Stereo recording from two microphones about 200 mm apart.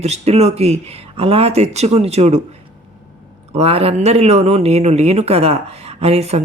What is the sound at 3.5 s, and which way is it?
Speech, 30° right (ahead or behind).